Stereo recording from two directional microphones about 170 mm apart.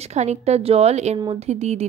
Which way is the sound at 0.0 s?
40° right (ahead or behind).